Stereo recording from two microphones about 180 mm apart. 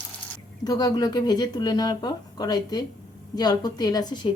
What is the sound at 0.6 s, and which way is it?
A woman's voice, 20° left (ahead or behind).